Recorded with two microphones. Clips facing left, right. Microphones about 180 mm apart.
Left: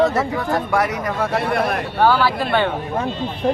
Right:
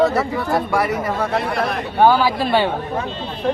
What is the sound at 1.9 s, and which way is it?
Speech, 15° right (ahead or behind).